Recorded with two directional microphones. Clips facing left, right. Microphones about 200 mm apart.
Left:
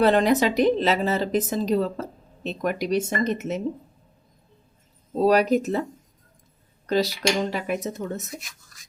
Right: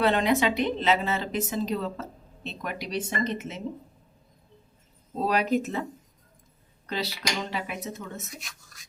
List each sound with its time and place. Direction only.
0.0 s a woman's voice: 40° left (ahead or behind)
5.2 s a woman's voice: 40° left (ahead or behind)
6.8 s a woman's voice: 40° left (ahead or behind)
8.4 s speech: centre (ahead or behind)